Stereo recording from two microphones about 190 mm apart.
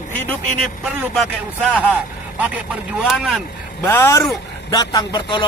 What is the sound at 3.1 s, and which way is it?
Speech, centre (ahead or behind).